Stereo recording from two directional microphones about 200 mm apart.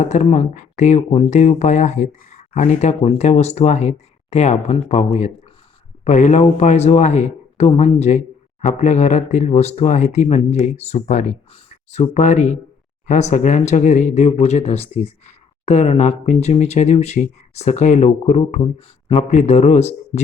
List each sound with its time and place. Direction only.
0.0 s speech: 35° left (ahead or behind)